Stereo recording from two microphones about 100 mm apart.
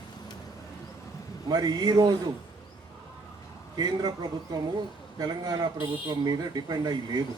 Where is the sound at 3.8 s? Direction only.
45° right (ahead or behind).